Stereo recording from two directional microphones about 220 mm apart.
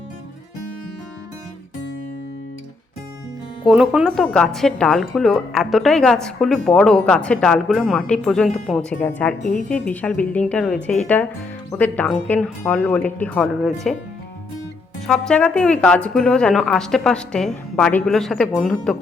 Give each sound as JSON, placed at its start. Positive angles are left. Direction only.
{"t": 3.7, "sound": "speech", "side_deg": -5}
{"t": 9.4, "sound": "a woman's voice", "side_deg": 35}
{"t": 9.6, "sound": "speech", "side_deg": 5}
{"t": 15.0, "sound": "speech", "side_deg": 5}